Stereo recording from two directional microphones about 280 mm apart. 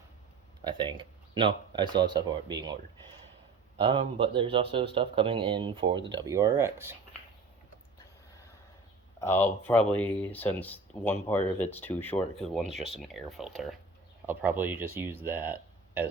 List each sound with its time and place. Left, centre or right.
0.6 s speech: centre
3.8 s speech: centre
9.2 s speech: centre
12.7 s speech: right
13.0 s speech: centre